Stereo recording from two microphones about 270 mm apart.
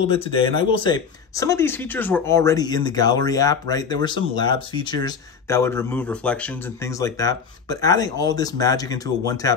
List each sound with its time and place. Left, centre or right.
0.0 s speech: centre